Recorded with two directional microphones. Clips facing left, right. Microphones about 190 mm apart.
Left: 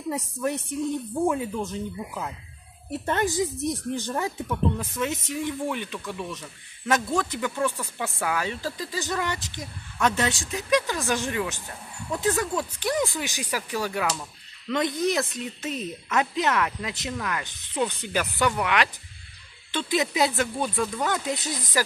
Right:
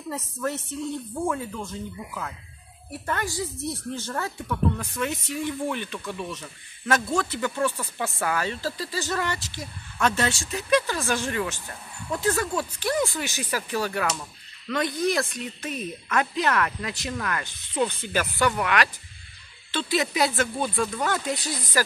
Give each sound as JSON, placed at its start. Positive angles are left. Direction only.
{"t": 0.1, "sound": "speech", "side_deg": 15}
{"t": 20.6, "sound": "speech", "side_deg": 0}
{"t": 21.0, "sound": "speech", "side_deg": 15}